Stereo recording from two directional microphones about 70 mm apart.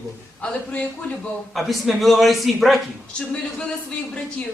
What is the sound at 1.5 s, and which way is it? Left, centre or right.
A man's voice, centre.